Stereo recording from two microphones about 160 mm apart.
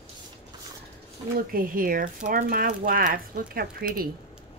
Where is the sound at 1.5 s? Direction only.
60° right (ahead or behind).